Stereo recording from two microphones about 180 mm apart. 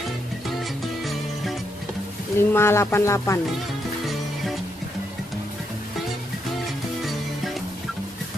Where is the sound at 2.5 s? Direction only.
15° left (ahead or behind).